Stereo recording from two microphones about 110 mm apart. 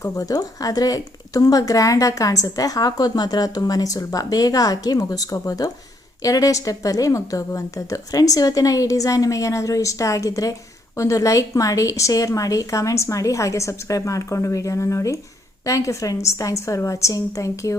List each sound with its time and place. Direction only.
0.0 s a woman's voice: 30° left (ahead or behind)